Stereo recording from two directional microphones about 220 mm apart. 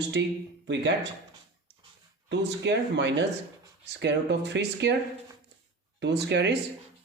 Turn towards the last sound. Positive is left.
turn(degrees=-50)  # may be behind; listen again after turning